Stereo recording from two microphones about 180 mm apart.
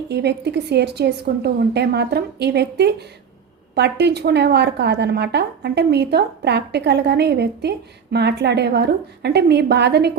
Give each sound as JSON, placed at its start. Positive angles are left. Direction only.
{"t": 0.1, "sound": "a woman's voice", "side_deg": -65}